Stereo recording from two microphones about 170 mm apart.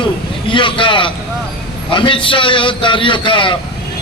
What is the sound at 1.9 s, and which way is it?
A man's voice, 30° left (ahead or behind).